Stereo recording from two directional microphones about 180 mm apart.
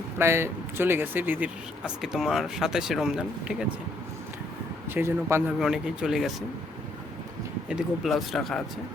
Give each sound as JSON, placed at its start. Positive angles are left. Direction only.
{"t": 0.2, "sound": "speech", "side_deg": -15}
{"t": 4.9, "sound": "speech", "side_deg": -10}
{"t": 7.7, "sound": "speech", "side_deg": 0}